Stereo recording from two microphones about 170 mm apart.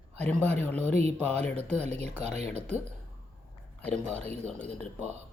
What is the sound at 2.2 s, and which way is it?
Speech, 40° right (ahead or behind).